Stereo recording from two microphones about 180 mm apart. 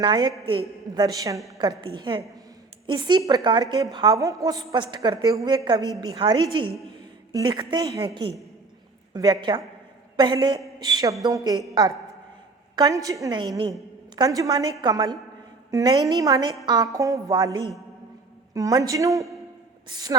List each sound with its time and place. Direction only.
0.0 s a woman's voice: 25° right (ahead or behind)
9.1 s a woman's voice: 20° right (ahead or behind)